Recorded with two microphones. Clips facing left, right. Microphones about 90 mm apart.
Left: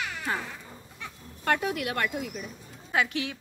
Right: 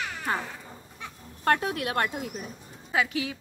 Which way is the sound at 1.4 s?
40° right (ahead or behind).